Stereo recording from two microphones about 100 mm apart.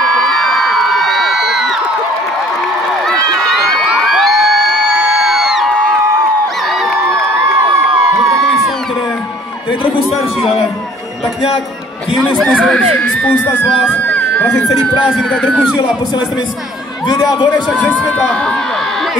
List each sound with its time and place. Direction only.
0.0 s a sound: centre (ahead or behind)
3.8 s crowd: 5° right (ahead or behind)
6.7 s a sound: centre (ahead or behind)
7.1 s a sound: 25° right (ahead or behind)
12.4 s speech: centre (ahead or behind)
12.9 s speech: 15° left (ahead or behind)
13.8 s crowd: 15° left (ahead or behind)
15.1 s speech: 10° left (ahead or behind)
17.6 s speech: 15° left (ahead or behind)